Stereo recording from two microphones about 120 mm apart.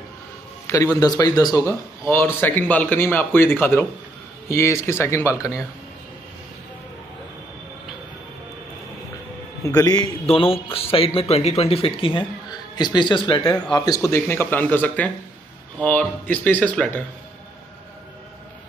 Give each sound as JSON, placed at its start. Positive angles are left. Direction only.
{"t": 0.7, "sound": "a man's voice", "side_deg": 25}
{"t": 9.8, "sound": "a man's voice", "side_deg": 30}
{"t": 10.2, "sound": "speech", "side_deg": 55}